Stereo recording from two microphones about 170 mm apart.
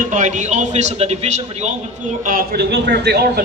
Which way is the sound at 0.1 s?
45° right (ahead or behind).